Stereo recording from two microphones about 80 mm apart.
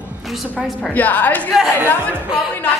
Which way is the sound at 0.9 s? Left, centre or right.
Left.